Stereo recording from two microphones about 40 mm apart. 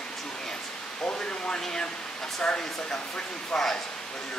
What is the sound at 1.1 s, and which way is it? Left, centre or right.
Speech, left.